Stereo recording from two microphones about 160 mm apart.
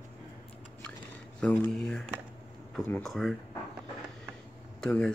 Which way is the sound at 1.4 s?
10° left (ahead or behind).